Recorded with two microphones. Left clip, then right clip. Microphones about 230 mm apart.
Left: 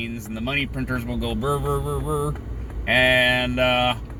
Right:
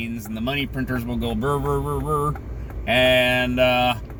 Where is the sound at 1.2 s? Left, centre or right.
Centre.